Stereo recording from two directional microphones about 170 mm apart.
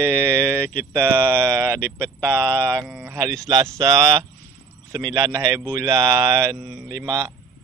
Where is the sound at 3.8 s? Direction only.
15° right (ahead or behind).